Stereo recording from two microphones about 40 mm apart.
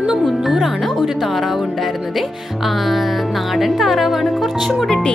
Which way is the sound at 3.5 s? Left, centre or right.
Centre.